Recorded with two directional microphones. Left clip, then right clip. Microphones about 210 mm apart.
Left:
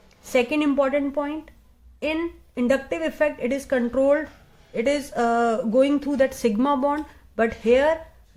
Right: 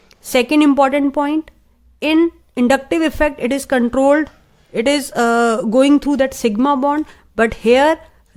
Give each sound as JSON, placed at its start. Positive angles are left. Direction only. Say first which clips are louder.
{"t": 0.1, "sound": "speech", "louder": "right 7 dB", "side_deg": -40}